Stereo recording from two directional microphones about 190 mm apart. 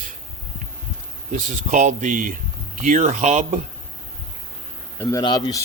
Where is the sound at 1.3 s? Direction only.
40° right (ahead or behind).